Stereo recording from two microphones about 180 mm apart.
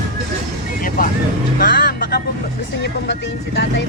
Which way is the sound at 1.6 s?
50° left (ahead or behind).